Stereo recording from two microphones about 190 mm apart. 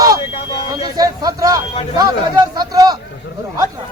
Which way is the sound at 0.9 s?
20° right (ahead or behind).